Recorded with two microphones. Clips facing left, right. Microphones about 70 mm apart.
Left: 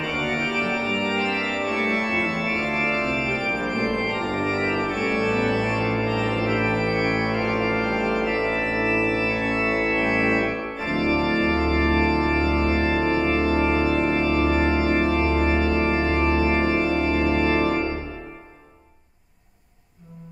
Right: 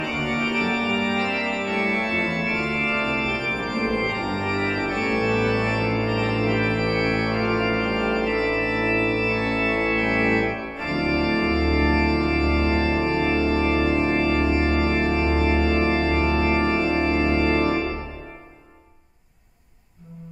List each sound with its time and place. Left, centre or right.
0.9 s organ: centre